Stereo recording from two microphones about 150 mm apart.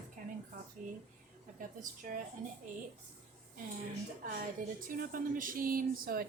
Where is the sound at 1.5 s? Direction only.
65° right (ahead or behind).